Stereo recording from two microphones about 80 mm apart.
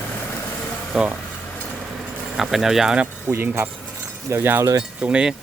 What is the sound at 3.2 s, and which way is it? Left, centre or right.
Speech, right.